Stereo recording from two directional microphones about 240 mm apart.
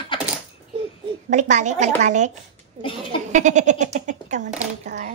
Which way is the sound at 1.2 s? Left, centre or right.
Right.